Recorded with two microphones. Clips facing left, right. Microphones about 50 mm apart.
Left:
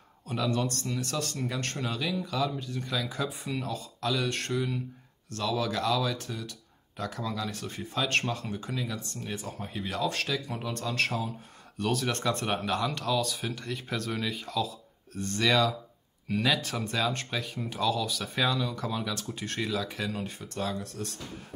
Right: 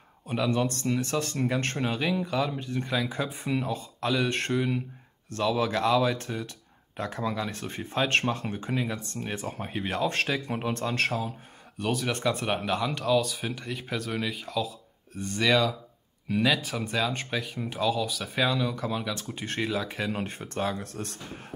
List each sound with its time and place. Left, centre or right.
0.3 s speech: right
11.0 s speech: centre
20.1 s speech: right